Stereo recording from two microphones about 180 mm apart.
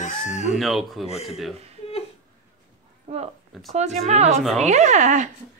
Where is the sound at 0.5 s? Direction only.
Centre (ahead or behind).